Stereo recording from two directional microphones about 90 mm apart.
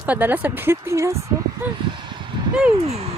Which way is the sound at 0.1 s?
20° right (ahead or behind).